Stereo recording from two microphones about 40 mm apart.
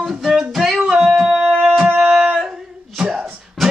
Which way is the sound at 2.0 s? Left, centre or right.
Centre.